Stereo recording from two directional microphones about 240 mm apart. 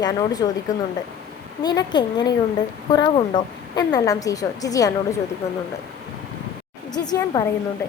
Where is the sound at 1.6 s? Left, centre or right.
Centre.